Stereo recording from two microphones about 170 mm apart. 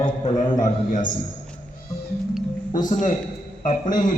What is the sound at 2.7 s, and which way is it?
A man's voice, 50° left (ahead or behind).